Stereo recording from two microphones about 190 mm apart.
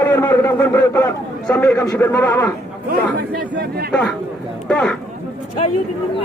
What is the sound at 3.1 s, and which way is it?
Speech, 60° right (ahead or behind).